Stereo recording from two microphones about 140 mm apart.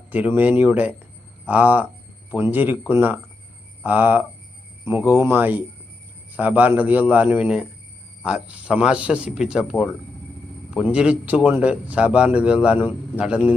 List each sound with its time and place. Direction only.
0.1 s a man's voice: 10° right (ahead or behind)